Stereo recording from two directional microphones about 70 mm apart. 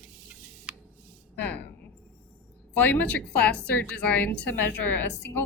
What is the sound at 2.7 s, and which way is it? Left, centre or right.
A woman's voice, left.